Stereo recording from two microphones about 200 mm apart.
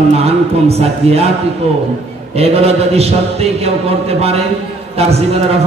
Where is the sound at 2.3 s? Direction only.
30° right (ahead or behind).